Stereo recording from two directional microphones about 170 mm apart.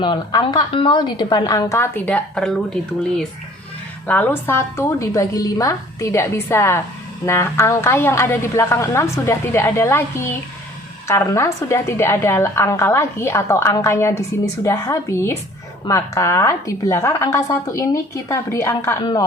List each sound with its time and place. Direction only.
0.0 s a woman's voice: 25° left (ahead or behind); by 2.6 s 5° left (ahead or behind)
4.0 s a woman's voice: 10° left (ahead or behind)